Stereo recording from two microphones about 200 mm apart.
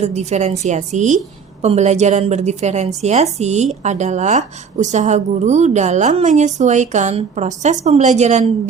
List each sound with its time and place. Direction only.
0.0 s a woman's voice: 35° right (ahead or behind)